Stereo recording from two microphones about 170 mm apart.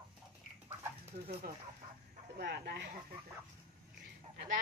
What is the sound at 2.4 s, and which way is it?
Speech, 70° right (ahead or behind).